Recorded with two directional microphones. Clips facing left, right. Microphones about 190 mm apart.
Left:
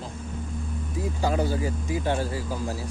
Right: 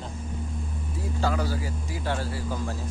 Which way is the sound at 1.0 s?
20° left (ahead or behind).